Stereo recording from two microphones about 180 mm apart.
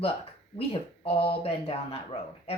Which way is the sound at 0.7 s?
30° left (ahead or behind).